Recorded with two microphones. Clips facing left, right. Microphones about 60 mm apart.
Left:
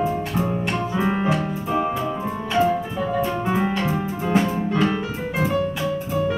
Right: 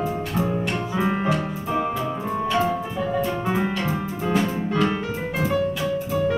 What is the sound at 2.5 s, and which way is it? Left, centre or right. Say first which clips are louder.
Music: left 4 dB; left.